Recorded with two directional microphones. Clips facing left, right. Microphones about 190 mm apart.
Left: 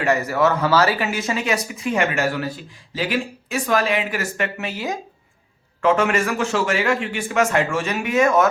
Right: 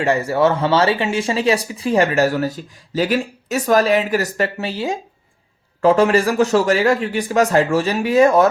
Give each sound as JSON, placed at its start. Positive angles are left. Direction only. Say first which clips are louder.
{"t": 0.0, "sound": "speech", "louder": "right 3 dB", "side_deg": -30}